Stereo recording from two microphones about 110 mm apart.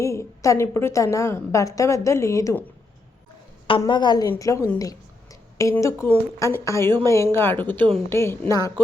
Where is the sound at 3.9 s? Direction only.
40° left (ahead or behind).